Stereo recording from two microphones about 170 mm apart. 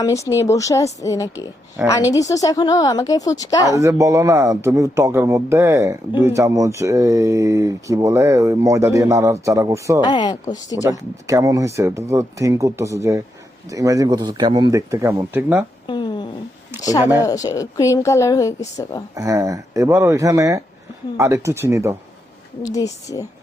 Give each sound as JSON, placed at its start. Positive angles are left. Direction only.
{"t": 0.0, "sound": "a woman's voice", "side_deg": 20}
{"t": 1.8, "sound": "speech", "side_deg": -10}
{"t": 2.1, "sound": "a woman's voice", "side_deg": 20}
{"t": 3.8, "sound": "speech", "side_deg": -20}
{"t": 10.0, "sound": "a woman's voice", "side_deg": 25}
{"t": 10.8, "sound": "a man's voice", "side_deg": -20}
{"t": 15.9, "sound": "a sound", "side_deg": 25}
{"t": 17.2, "sound": "a woman's voice", "side_deg": 20}
{"t": 19.1, "sound": "a man's voice", "side_deg": -20}
{"t": 22.6, "sound": "a woman's voice", "side_deg": 20}